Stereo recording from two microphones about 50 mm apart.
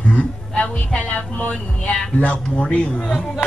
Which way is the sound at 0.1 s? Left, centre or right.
Left.